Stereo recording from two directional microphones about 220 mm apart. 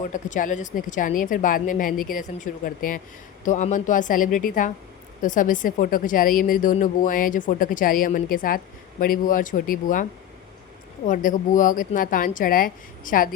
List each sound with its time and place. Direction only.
0.0 s a woman's voice: 35° left (ahead or behind)